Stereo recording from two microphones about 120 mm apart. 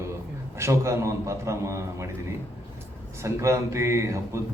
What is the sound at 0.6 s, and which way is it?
A man's voice, 25° right (ahead or behind).